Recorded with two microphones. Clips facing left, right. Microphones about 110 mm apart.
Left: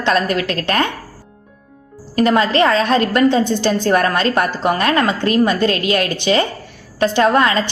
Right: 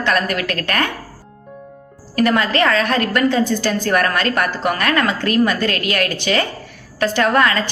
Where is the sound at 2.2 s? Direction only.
25° left (ahead or behind).